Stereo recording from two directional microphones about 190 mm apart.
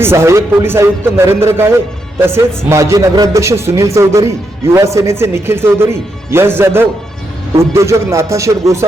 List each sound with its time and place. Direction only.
0.0 s speech: 15° right (ahead or behind)